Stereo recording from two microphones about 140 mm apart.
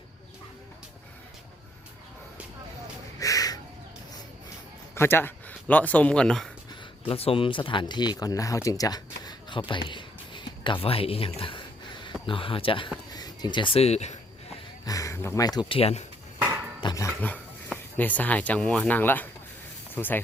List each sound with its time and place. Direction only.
3.2 s crow: 25° left (ahead or behind)
4.9 s speech: 15° left (ahead or behind)
7.1 s speech: 45° left (ahead or behind)
13.1 s speech: 30° left (ahead or behind); by 14.2 s 50° left (ahead or behind)
14.8 s speech: 25° left (ahead or behind)
15.7 s speech: 45° left (ahead or behind)
16.4 s a sound: 20° right (ahead or behind)
16.8 s dog: 25° left (ahead or behind)
17.2 s speech: 10° left (ahead or behind)